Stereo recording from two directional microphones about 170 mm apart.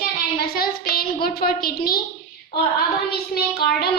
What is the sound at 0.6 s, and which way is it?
A woman's voice, 60° left (ahead or behind).